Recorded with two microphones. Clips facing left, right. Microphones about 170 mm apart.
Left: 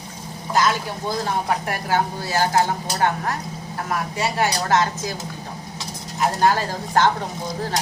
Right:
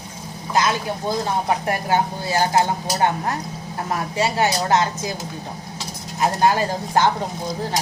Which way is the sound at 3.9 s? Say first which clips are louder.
Right 2 dB; 25° right (ahead or behind).